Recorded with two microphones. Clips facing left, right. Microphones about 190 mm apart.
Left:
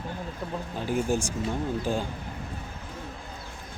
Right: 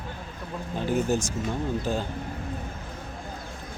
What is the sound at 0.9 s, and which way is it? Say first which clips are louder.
Speech: right 1 dB; 10° left (ahead or behind).